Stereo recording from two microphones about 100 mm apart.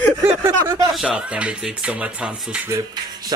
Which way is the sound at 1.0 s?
10° right (ahead or behind).